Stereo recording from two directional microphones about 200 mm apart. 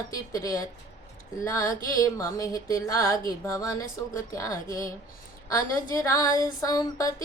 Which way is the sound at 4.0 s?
20° left (ahead or behind).